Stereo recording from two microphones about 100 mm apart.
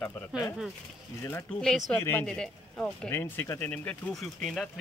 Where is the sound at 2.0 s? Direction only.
25° left (ahead or behind).